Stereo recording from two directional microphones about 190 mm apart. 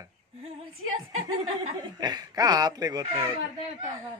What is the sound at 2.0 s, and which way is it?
A man's voice, 20° right (ahead or behind).